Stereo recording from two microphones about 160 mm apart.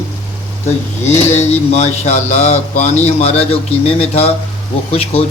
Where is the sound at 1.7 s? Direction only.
45° left (ahead or behind).